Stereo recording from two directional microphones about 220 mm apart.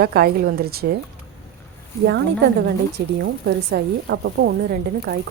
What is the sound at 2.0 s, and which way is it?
Speech, 50° right (ahead or behind).